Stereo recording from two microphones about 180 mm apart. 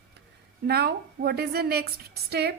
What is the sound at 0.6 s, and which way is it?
A woman's voice, 60° right (ahead or behind).